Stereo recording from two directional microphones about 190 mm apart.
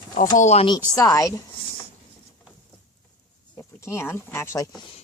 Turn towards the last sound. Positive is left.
turn(degrees=15)  # may be behind; listen again after turning